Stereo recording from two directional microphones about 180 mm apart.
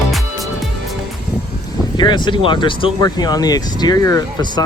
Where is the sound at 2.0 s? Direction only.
25° left (ahead or behind).